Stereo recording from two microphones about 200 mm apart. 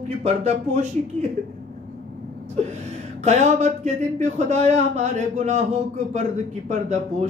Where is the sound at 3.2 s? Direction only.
35° right (ahead or behind).